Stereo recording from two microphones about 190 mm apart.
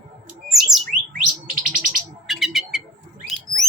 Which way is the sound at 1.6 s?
45° right (ahead or behind).